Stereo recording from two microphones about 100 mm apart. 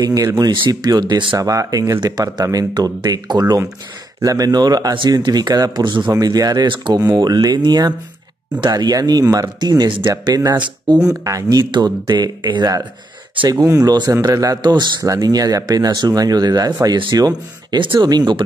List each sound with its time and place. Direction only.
0.0 s speech: 35° right (ahead or behind); by 1.4 s 50° right (ahead or behind)
1.4 s speech: 35° right (ahead or behind)
5.8 s speech: 50° right (ahead or behind)
7.0 s speech: 40° right (ahead or behind)
14.6 s speech: 45° right (ahead or behind)
18.0 s speech: 45° right (ahead or behind)